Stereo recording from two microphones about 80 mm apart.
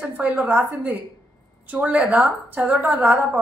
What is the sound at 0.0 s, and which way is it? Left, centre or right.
A woman's voice, centre.